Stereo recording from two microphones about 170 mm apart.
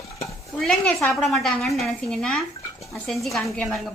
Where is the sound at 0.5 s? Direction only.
5° left (ahead or behind).